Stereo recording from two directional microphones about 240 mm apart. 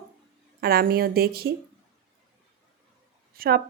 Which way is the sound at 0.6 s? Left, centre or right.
Right.